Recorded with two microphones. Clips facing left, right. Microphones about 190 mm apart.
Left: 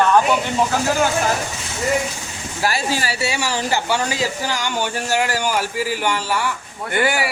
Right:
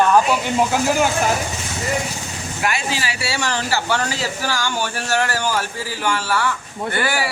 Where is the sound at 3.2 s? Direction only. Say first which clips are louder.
Left 1 dB; 15° left (ahead or behind).